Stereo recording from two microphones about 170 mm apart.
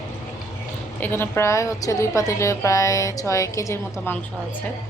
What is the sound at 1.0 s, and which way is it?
A woman's voice, 15° left (ahead or behind).